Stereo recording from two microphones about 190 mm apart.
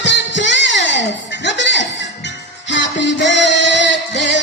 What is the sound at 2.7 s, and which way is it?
Music, 70° left (ahead or behind).